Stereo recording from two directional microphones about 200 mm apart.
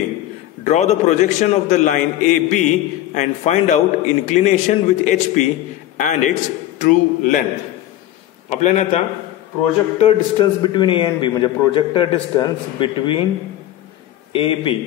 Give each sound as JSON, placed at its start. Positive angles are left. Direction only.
{"t": 0.7, "sound": "a man's voice", "side_deg": 35}
{"t": 8.5, "sound": "a man's voice", "side_deg": 35}
{"t": 14.3, "sound": "a man's voice", "side_deg": 25}